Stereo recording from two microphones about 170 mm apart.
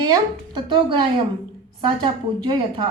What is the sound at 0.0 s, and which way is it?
A woman's voice, 25° right (ahead or behind).